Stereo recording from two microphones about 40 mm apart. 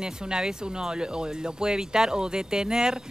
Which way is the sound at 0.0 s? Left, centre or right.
Right.